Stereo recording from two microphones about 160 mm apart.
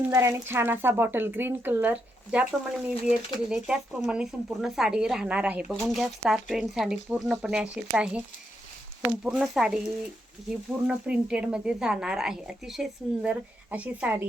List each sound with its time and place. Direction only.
0.1 s speech: 15° right (ahead or behind)
10.8 s speech: 5° right (ahead or behind)